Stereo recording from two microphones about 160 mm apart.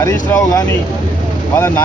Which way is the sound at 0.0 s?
20° left (ahead or behind).